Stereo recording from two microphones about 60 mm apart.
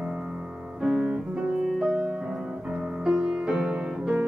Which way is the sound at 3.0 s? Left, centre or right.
Centre.